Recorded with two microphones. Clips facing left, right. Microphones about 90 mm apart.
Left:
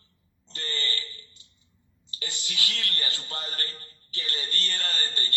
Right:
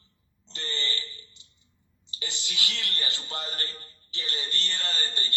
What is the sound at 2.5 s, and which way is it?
A man's voice, 25° right (ahead or behind).